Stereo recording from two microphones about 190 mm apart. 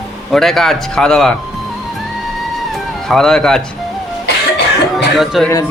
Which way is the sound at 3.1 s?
Centre (ahead or behind).